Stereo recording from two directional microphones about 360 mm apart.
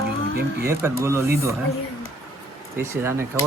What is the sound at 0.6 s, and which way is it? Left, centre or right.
Speech, centre.